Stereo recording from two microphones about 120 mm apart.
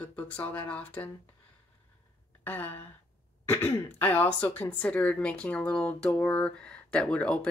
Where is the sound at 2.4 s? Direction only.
15° left (ahead or behind).